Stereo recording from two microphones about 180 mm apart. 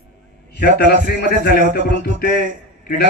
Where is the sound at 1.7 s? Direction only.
70° left (ahead or behind).